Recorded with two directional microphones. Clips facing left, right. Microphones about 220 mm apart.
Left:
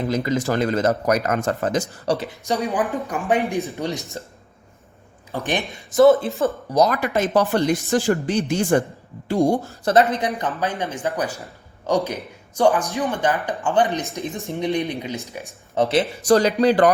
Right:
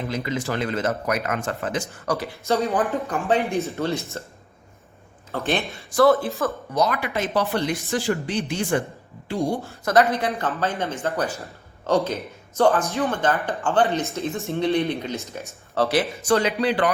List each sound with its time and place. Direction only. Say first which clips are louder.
0.1 s speech: left 5 dB; 40° left (ahead or behind)
2.1 s speech: right 1 dB; 20° left (ahead or behind)
5.3 s speech: even; 15° left (ahead or behind)
6.7 s speech: left 5 dB; 40° left (ahead or behind)
9.8 s speech: left 1 dB; 25° left (ahead or behind)
16.2 s speech: left 7 dB; 40° left (ahead or behind)